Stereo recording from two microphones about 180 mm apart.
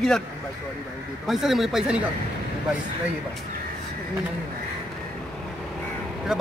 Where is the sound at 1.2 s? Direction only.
Centre (ahead or behind).